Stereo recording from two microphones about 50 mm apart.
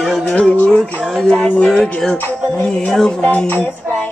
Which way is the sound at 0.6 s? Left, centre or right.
Centre.